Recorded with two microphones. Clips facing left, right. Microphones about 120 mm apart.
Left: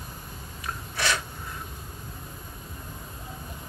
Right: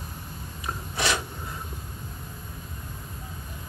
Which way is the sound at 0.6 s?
20° right (ahead or behind).